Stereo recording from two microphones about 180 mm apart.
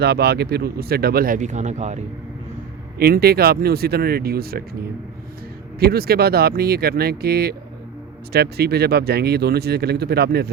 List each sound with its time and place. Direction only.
0.0 s speech: 65° right (ahead or behind); by 2.0 s 40° right (ahead or behind)
3.0 s speech: 60° right (ahead or behind)
5.8 s speech: 60° right (ahead or behind)